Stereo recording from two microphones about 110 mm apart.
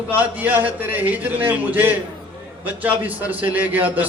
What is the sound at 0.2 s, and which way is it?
A man's voice, 15° right (ahead or behind).